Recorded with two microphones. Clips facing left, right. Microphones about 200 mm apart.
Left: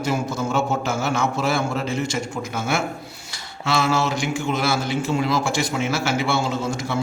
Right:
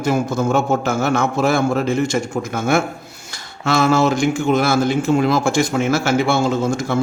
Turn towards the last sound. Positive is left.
turn(degrees=-50)  # may be behind; listen again after turning